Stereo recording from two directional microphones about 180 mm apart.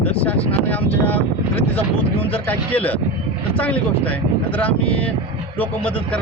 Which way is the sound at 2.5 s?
10° left (ahead or behind).